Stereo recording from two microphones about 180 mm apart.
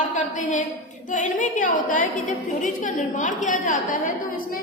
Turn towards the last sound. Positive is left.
turn(degrees=45)  # may be behind; listen again after turning